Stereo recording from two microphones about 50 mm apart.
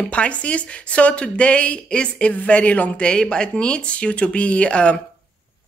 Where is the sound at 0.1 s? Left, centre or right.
Left.